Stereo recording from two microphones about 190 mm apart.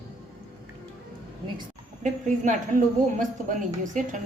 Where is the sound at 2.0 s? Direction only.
40° right (ahead or behind).